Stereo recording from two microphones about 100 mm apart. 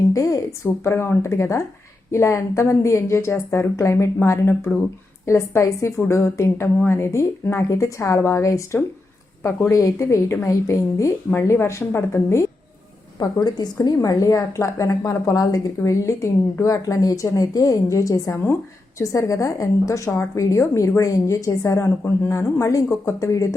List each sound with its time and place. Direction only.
0.1 s a woman's voice: 30° left (ahead or behind)
13.1 s a woman's voice: 40° left (ahead or behind)